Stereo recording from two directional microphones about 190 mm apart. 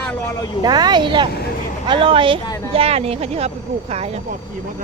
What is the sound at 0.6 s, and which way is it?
Speech, 20° right (ahead or behind).